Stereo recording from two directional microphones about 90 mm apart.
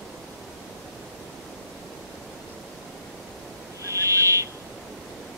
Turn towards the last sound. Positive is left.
turn(degrees=-35)  # may be behind; listen again after turning